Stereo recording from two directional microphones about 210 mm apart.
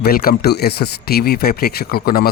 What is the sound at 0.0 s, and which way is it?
Speech, 45° left (ahead or behind).